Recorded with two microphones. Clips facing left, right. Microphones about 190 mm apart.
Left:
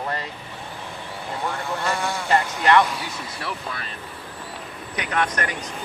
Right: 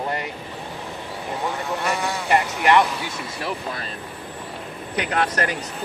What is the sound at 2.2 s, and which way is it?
Speech, 15° right (ahead or behind).